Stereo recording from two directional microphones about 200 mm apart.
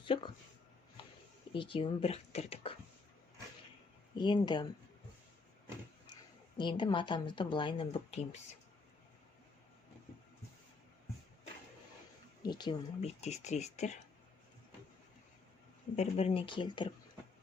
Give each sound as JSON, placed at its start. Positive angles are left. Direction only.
{"t": 0.0, "sound": "a sound", "side_deg": 25}
{"t": 1.5, "sound": "speech", "side_deg": 25}
{"t": 4.1, "sound": "speech", "side_deg": 20}
{"t": 6.6, "sound": "speech", "side_deg": 25}
{"t": 12.4, "sound": "speech", "side_deg": 20}
{"t": 16.0, "sound": "speech", "side_deg": 30}